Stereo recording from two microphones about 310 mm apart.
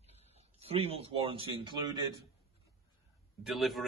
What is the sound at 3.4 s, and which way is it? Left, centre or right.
Speech, centre.